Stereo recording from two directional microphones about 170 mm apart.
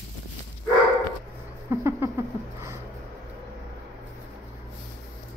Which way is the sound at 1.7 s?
15° right (ahead or behind).